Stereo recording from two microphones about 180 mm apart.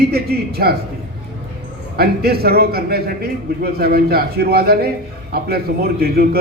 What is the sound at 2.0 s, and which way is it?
A man's voice, 60° right (ahead or behind).